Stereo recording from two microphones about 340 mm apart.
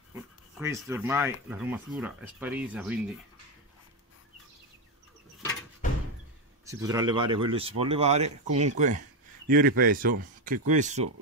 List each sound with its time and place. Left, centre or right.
0.1 s speech: centre
6.6 s speech: centre; by 10.1 s right
10.2 s a sound: right
10.7 s speech: right